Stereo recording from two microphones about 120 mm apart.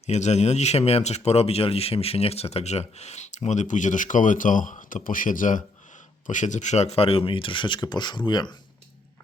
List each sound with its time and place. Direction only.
0.0 s speech: 65° left (ahead or behind); by 8.5 s 40° left (ahead or behind)